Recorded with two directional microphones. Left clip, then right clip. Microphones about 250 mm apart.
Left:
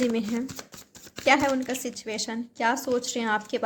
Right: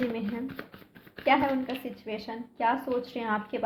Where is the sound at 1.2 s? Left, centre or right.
Left.